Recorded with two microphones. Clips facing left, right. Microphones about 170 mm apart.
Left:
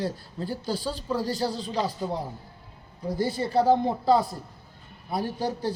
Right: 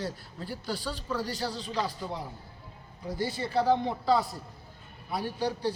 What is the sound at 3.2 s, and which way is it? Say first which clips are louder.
A man's voice: left 5 dB; 40° left (ahead or behind).